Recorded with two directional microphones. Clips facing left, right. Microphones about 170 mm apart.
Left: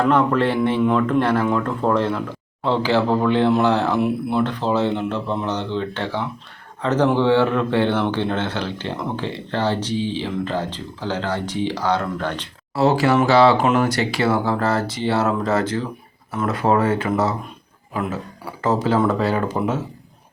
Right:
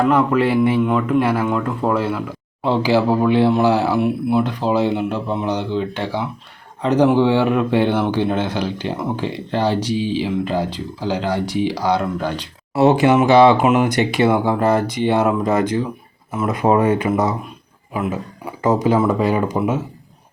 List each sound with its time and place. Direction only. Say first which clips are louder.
0.1 s speech: right 2 dB; 10° right (ahead or behind)